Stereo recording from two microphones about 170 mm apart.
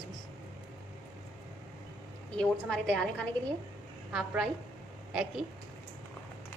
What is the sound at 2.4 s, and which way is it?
A woman's voice, 5° left (ahead or behind).